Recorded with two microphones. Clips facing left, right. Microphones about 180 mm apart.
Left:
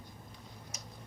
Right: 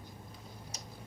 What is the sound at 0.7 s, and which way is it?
Tick-tock, 35° right (ahead or behind).